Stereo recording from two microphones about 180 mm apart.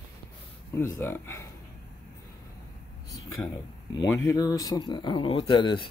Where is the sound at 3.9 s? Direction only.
20° left (ahead or behind).